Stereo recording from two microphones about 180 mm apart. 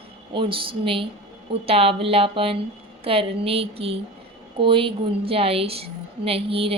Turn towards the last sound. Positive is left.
turn(degrees=-30)  # may be behind; listen again after turning